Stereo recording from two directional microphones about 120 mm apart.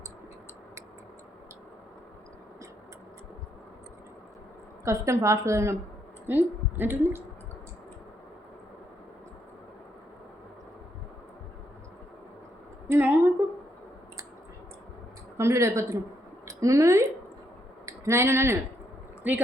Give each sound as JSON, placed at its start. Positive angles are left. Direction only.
{"t": 4.9, "sound": "a woman's voice", "side_deg": -25}
{"t": 12.9, "sound": "a sound", "side_deg": -15}
{"t": 15.4, "sound": "a woman's voice", "side_deg": -25}